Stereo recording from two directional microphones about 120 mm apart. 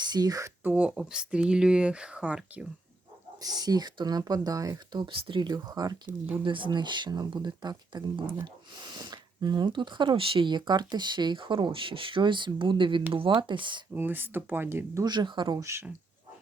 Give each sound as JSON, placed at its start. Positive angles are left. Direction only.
{"t": 0.0, "sound": "speech", "side_deg": -35}
{"t": 0.6, "sound": "speech", "side_deg": -10}
{"t": 3.4, "sound": "speech", "side_deg": -35}
{"t": 6.4, "sound": "speech", "side_deg": -45}
{"t": 13.9, "sound": "speech", "side_deg": -15}
{"t": 15.0, "sound": "speech", "side_deg": -35}
{"t": 15.5, "sound": "speech", "side_deg": -25}